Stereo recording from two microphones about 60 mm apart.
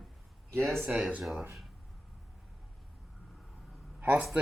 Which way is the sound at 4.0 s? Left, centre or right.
Right.